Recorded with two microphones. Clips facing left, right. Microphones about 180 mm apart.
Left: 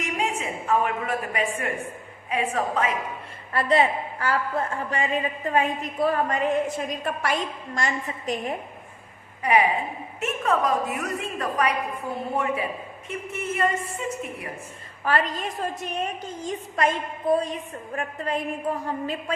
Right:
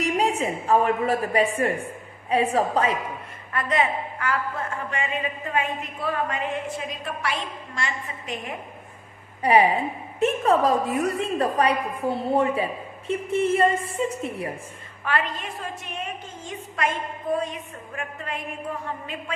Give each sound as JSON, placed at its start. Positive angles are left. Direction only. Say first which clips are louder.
{"t": 0.0, "sound": "a woman's voice", "louder": "right 5 dB", "side_deg": -35}
{"t": 3.5, "sound": "a woman's voice", "louder": "left 3 dB", "side_deg": 35}
{"t": 9.4, "sound": "a woman's voice", "louder": "right 3 dB", "side_deg": -30}
{"t": 15.0, "sound": "a woman's voice", "louder": "left 2 dB", "side_deg": 40}